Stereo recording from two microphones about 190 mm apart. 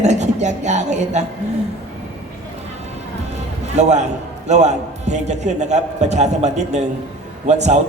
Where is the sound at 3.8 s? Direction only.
35° right (ahead or behind).